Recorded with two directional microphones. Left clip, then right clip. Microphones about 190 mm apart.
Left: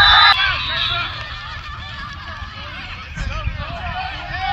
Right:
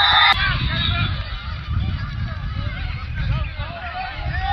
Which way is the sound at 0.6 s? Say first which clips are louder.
Left 4 dB; 45° right (ahead or behind).